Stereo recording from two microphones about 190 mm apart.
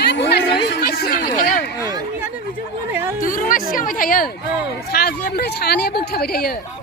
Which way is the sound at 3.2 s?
45° left (ahead or behind).